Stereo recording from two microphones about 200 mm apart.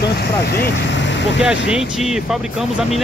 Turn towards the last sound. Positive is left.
turn(degrees=0)  # may be behind; listen again after turning